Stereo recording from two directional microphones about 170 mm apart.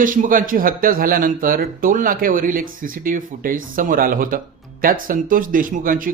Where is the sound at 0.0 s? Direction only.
50° right (ahead or behind).